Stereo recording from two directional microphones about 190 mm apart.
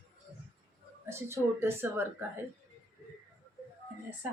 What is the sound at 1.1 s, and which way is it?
Speech, 15° right (ahead or behind).